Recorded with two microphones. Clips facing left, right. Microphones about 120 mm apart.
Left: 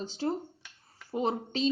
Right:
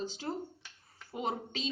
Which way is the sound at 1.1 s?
30° left (ahead or behind).